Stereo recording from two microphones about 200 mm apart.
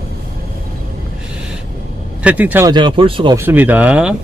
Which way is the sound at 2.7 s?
25° right (ahead or behind).